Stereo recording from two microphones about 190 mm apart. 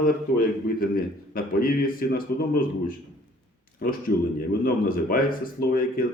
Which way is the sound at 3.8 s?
50° left (ahead or behind).